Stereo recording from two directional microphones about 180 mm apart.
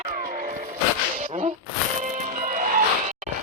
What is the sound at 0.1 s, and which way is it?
Music, 50° right (ahead or behind).